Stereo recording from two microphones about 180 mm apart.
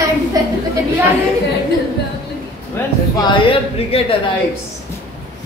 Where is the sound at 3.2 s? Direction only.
30° left (ahead or behind).